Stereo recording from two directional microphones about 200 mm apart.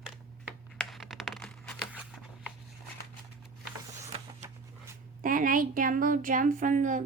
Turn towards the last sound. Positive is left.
turn(degrees=-40)  # may be behind; listen again after turning